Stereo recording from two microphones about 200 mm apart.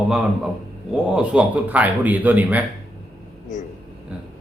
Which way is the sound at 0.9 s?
5° right (ahead or behind).